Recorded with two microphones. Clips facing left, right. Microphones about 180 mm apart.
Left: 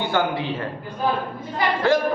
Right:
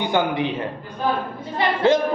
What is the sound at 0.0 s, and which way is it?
A man's voice, 20° right (ahead or behind).